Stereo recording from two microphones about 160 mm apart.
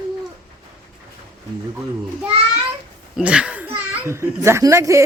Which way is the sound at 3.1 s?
5° right (ahead or behind).